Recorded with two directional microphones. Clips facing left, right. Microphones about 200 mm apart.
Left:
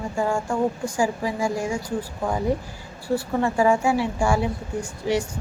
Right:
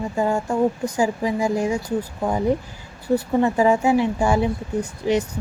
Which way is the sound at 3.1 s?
20° right (ahead or behind).